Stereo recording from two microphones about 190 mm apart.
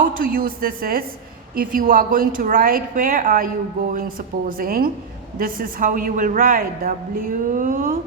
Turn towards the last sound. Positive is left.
turn(degrees=-45)  # may be behind; listen again after turning